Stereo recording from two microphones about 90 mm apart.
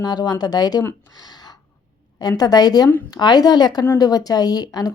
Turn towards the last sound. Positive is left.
turn(degrees=45)  # may be behind; listen again after turning